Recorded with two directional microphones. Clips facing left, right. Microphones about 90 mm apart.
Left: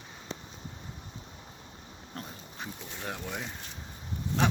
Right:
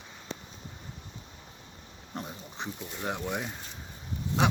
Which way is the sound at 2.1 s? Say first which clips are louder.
Right 4 dB; 15° right (ahead or behind).